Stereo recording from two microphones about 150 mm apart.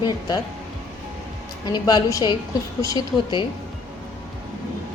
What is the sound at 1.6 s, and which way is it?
A woman's voice, 30° left (ahead or behind).